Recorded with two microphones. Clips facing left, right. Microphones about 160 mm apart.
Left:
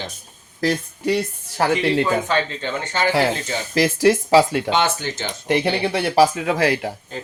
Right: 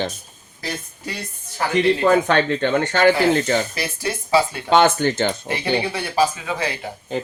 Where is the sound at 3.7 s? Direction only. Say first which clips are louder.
Left 10 dB; 90° left.